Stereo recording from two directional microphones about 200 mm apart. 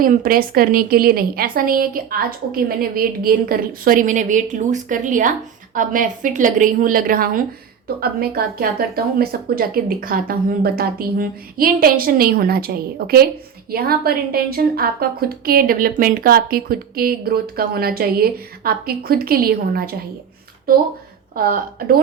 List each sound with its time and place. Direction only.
0.0 s a woman's voice: 45° right (ahead or behind)
21.3 s speech: 45° right (ahead or behind)